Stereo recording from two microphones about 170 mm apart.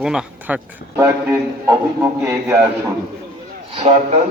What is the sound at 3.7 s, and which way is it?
Speech, 40° right (ahead or behind).